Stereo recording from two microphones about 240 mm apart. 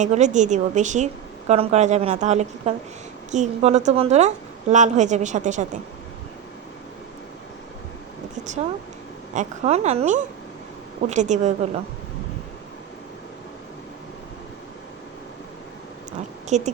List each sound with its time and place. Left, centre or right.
0.0 s a woman's voice: right
9.3 s a woman's voice: right
16.5 s a woman's voice: right